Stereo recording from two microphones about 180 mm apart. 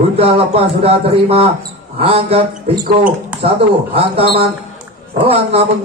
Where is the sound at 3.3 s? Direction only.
5° right (ahead or behind).